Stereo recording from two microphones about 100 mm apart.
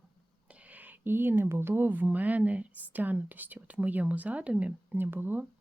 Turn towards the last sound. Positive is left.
turn(degrees=-20)  # may be behind; listen again after turning